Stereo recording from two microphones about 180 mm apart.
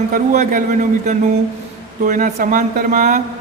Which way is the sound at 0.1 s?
45° right (ahead or behind).